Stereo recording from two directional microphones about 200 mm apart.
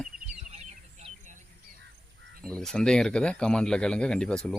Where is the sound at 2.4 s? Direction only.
5° left (ahead or behind).